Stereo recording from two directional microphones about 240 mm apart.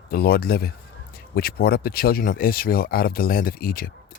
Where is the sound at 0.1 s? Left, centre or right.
Left.